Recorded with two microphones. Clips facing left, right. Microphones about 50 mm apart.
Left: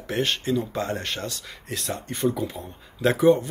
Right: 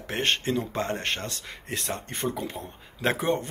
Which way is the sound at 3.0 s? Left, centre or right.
Right.